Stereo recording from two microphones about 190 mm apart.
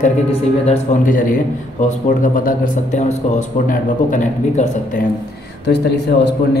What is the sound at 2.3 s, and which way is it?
Speech, 45° left (ahead or behind).